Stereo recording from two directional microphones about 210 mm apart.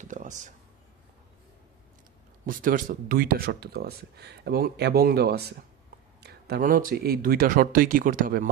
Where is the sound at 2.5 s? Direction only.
40° right (ahead or behind).